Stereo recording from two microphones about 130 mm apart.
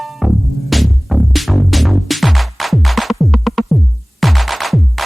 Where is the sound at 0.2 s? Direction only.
Centre (ahead or behind).